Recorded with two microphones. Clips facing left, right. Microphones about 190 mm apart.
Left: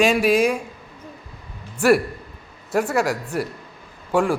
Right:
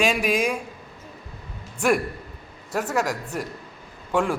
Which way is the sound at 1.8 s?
5° left (ahead or behind).